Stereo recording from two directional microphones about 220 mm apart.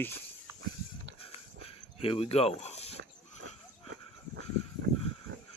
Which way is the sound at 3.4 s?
60° right (ahead or behind).